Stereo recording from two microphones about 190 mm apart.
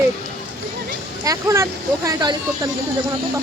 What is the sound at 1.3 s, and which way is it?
Speech, 15° right (ahead or behind).